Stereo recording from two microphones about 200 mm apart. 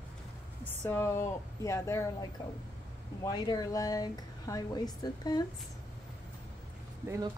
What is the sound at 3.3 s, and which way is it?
Speech, 20° left (ahead or behind).